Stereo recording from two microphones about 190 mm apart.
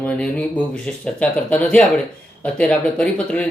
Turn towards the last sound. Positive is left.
turn(degrees=5)  # may be behind; listen again after turning